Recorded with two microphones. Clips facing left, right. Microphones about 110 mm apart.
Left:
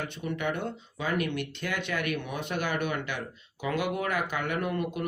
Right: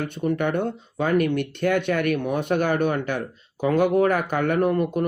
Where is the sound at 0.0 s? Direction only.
50° right (ahead or behind).